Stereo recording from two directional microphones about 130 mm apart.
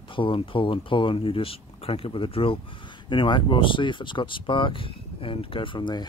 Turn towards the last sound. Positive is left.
turn(degrees=35)  # may be behind; listen again after turning